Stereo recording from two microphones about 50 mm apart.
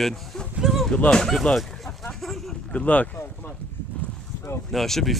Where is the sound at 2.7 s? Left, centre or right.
Left.